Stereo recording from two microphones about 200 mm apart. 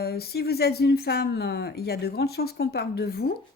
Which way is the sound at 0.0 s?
50° left (ahead or behind).